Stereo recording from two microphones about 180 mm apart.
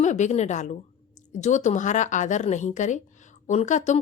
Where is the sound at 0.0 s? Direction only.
40° left (ahead or behind).